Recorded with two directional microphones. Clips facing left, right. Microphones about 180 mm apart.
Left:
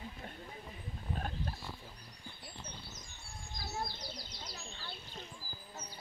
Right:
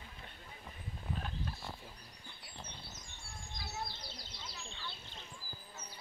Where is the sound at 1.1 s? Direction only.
45° left (ahead or behind).